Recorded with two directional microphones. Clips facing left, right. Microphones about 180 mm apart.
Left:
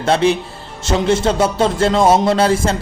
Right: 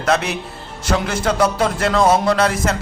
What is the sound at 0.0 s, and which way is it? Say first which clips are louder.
A man's voice: left 5 dB; 30° left (ahead or behind).